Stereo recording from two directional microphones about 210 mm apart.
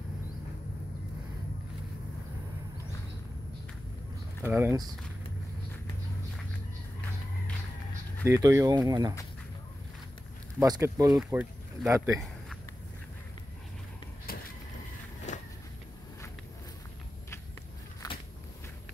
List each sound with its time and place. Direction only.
4.5 s speech: 10° right (ahead or behind)
8.3 s speech: 15° right (ahead or behind)
10.6 s speech: 15° right (ahead or behind)
15.3 s walk: 35° left (ahead or behind)
18.0 s a sound: 15° left (ahead or behind)